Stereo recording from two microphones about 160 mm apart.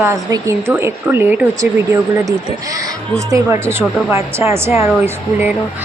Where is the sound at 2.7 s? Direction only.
20° right (ahead or behind).